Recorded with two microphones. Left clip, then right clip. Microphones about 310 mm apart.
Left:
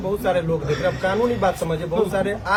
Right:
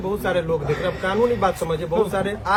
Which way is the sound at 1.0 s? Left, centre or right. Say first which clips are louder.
Right 2 dB; centre.